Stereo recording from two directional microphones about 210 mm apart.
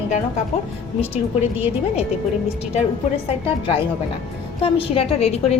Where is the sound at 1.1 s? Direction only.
25° left (ahead or behind).